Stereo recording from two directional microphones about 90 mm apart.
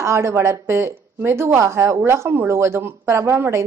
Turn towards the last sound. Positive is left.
turn(degrees=-30)  # may be behind; listen again after turning